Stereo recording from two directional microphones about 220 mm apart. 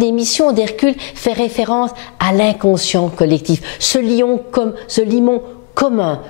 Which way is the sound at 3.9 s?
15° left (ahead or behind).